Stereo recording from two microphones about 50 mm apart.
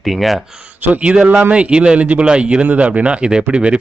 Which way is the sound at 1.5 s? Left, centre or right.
Right.